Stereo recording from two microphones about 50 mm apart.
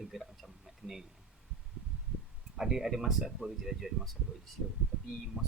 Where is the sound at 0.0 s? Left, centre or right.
Centre.